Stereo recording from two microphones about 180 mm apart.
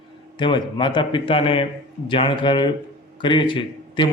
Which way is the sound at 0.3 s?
25° left (ahead or behind).